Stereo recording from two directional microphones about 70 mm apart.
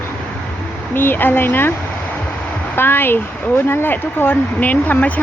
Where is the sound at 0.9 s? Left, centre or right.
Left.